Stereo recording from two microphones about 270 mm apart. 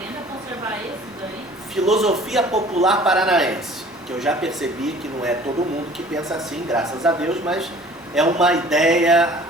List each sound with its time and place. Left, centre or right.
1.7 s speech: centre